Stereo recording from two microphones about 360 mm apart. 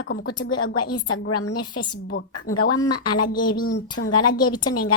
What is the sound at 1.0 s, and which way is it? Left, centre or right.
A woman's voice, left.